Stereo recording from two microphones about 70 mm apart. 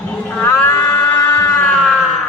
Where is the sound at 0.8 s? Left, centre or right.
Left.